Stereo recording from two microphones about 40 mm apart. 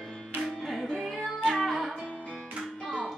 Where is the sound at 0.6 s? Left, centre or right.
Centre.